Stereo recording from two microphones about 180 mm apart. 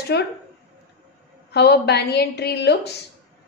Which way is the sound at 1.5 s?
65° left (ahead or behind).